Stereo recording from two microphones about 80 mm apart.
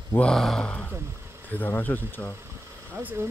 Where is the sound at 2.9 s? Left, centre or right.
Right.